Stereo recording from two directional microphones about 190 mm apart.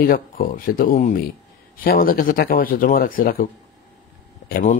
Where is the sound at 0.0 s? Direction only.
50° left (ahead or behind).